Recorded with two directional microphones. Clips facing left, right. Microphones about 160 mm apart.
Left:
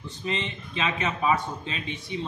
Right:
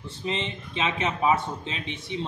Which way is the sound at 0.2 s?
25° right (ahead or behind).